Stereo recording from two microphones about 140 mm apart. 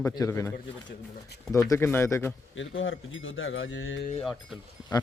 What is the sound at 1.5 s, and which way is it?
Speech, 20° left (ahead or behind).